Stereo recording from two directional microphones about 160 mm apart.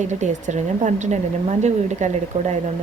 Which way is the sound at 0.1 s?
50° right (ahead or behind).